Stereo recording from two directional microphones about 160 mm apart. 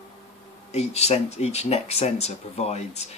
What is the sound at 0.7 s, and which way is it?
Speech, 40° left (ahead or behind).